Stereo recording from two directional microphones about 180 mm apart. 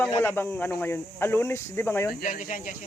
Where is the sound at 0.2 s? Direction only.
10° left (ahead or behind).